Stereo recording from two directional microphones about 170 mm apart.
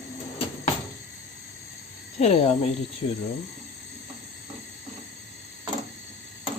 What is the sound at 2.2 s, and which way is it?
Speech, 40° left (ahead or behind).